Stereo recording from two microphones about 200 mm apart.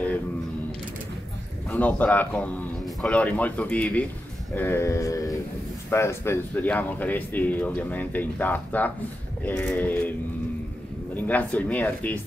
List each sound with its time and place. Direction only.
1.7 s speech: 10° left (ahead or behind)
9.4 s a sound: 10° left (ahead or behind)
11.1 s speech: 5° left (ahead or behind)